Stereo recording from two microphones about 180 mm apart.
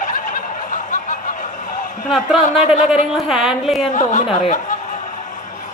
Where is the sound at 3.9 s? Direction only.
45° left (ahead or behind).